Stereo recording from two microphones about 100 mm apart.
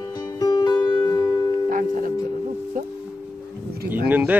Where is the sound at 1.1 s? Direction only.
35° left (ahead or behind).